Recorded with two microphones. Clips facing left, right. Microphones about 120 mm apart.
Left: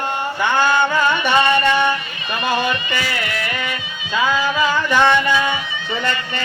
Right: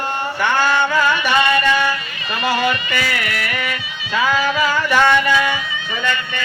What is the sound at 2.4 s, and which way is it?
Music, 20° left (ahead or behind).